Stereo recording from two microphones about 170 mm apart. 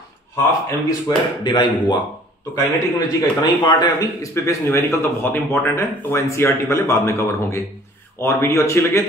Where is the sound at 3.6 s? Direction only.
25° left (ahead or behind).